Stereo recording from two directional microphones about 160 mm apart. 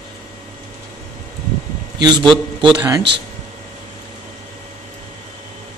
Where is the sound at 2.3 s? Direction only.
30° right (ahead or behind).